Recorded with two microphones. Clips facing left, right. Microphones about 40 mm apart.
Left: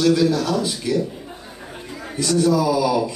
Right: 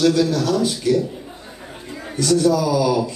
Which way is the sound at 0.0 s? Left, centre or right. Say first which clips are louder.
Even; centre.